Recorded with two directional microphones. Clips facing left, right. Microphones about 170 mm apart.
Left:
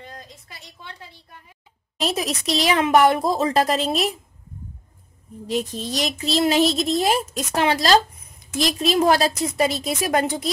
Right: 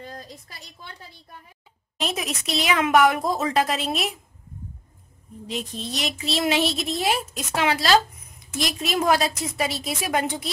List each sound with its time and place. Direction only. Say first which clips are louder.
0.0 s a woman's voice: right 2 dB; 35° right (ahead or behind)
2.0 s speech: left 4 dB; 35° left (ahead or behind)
5.8 s speech: left 4 dB; 40° left (ahead or behind)